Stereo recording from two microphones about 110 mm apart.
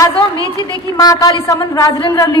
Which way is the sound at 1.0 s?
30° left (ahead or behind).